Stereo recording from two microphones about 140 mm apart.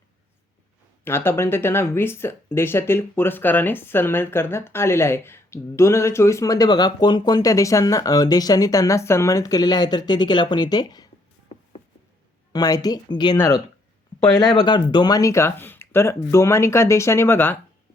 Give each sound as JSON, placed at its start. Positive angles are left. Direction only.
{"t": 1.0, "sound": "speech", "side_deg": 15}
{"t": 12.5, "sound": "speech", "side_deg": 25}
{"t": 13.3, "sound": "speech", "side_deg": 20}
{"t": 14.3, "sound": "speech", "side_deg": 30}